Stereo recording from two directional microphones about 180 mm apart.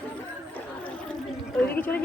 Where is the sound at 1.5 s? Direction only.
10° left (ahead or behind).